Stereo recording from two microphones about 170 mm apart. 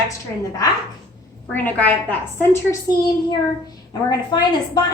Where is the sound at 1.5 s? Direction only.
10° left (ahead or behind).